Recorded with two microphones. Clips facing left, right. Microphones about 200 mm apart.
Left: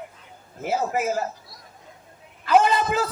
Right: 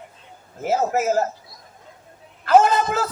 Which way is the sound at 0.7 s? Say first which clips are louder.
Right 4 dB; 45° right (ahead or behind).